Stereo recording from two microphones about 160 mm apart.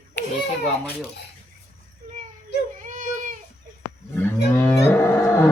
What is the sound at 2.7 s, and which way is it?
Baby cry, 55° right (ahead or behind).